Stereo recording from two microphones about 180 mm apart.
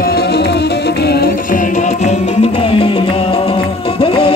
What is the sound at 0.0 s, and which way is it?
Music, 60° left (ahead or behind).